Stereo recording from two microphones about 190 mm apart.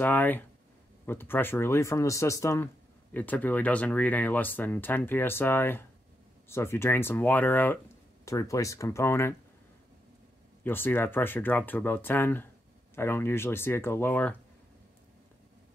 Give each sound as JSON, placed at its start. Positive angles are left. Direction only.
{"t": 0.0, "sound": "speech", "side_deg": 10}
{"t": 10.6, "sound": "speech", "side_deg": 10}